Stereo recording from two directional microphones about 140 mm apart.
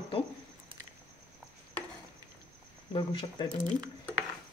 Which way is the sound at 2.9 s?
40° left (ahead or behind).